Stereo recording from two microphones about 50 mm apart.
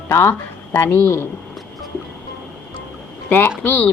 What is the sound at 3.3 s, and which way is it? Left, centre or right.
Speech, left.